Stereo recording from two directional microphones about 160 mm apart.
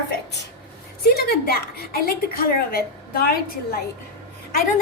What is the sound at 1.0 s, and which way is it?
A woman's voice, 75° left (ahead or behind).